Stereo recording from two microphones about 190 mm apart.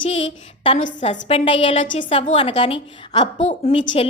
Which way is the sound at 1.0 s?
35° left (ahead or behind).